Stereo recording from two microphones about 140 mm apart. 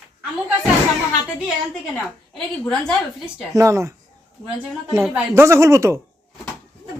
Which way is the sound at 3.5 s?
20° right (ahead or behind).